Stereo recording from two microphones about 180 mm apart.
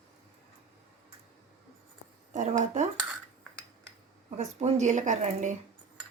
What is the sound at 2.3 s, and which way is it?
Speech, 40° right (ahead or behind).